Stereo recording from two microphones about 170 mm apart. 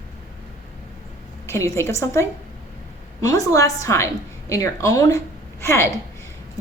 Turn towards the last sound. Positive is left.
turn(degrees=15)  # may be behind; listen again after turning